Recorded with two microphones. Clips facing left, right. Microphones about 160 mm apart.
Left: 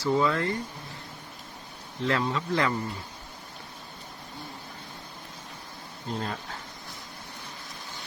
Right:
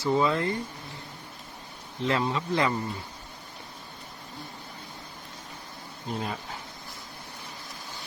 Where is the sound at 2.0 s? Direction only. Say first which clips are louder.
Even; 20° right (ahead or behind).